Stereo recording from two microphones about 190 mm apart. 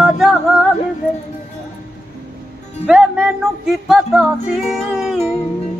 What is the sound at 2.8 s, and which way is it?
Music, 5° right (ahead or behind).